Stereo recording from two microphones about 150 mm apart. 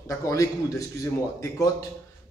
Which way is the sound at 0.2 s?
20° left (ahead or behind).